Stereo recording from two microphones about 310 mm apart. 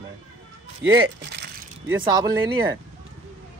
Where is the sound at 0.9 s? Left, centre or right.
Right.